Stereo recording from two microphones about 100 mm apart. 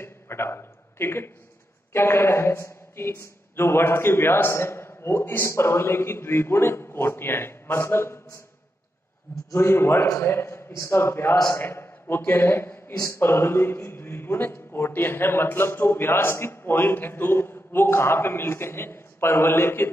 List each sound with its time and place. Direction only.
0.0 s a sound: 25° left (ahead or behind)
1.9 s a man's voice: 25° left (ahead or behind)
9.5 s a man's voice: 25° left (ahead or behind)